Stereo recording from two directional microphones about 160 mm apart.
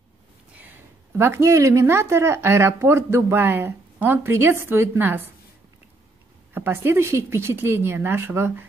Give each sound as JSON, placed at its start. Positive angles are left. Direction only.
{"t": 1.1, "sound": "speech", "side_deg": -15}
{"t": 6.5, "sound": "speech", "side_deg": -15}